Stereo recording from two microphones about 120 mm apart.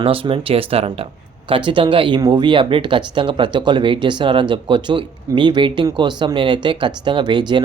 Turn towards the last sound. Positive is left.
turn(degrees=-40)  # may be behind; listen again after turning